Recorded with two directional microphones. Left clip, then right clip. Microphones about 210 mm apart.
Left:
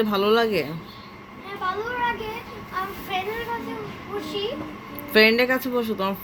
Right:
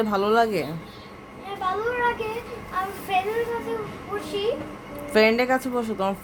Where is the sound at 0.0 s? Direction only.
15° right (ahead or behind).